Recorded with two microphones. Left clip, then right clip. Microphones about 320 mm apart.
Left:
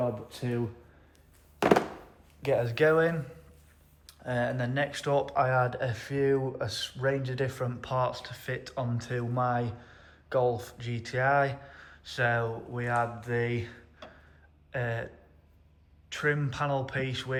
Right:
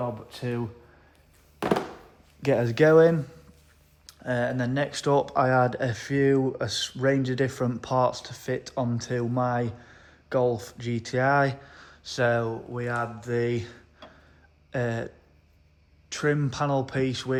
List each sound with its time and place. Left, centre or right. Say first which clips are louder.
0.3 s speech: right 2 dB; right
1.5 s thunk: left 3 dB; centre
2.4 s speech: right 4 dB; right